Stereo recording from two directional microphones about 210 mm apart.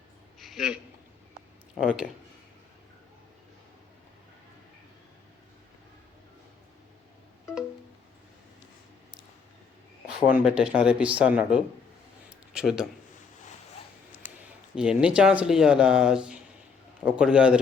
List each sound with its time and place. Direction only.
0.3 s a sound: centre (ahead or behind)
1.8 s speech: centre (ahead or behind)
10.2 s speech: 5° right (ahead or behind)
14.8 s speech: 5° right (ahead or behind)